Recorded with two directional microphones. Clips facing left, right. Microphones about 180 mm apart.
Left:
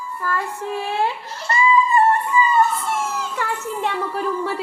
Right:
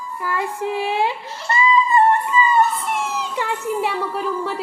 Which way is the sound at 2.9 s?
15° right (ahead or behind).